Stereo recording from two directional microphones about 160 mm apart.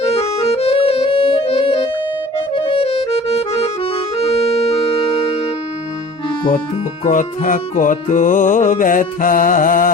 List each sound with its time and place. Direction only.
0.0 s accordion: 40° left (ahead or behind)
7.0 s music: 55° left (ahead or behind)